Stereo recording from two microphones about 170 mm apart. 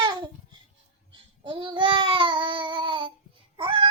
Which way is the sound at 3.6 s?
30° right (ahead or behind).